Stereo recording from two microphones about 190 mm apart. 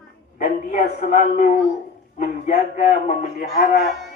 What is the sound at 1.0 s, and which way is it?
Speech, 40° left (ahead or behind).